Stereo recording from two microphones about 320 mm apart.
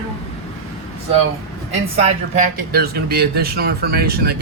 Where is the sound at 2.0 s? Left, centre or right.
Right.